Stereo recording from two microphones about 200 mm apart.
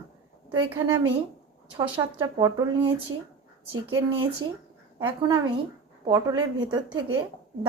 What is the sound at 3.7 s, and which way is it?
Speech, 90° right.